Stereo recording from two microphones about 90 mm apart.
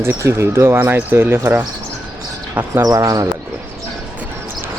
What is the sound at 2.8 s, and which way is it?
Speech, 45° right (ahead or behind).